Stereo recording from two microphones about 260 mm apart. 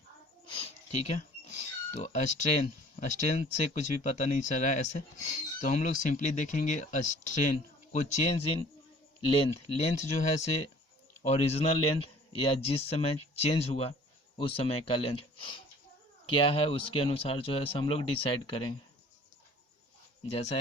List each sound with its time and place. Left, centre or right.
0.5 s speech: left
20.3 s speech: left